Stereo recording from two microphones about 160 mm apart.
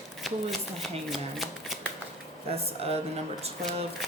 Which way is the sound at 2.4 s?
40° right (ahead or behind).